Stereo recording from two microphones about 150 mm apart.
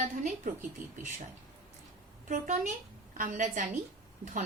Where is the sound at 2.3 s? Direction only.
55° right (ahead or behind).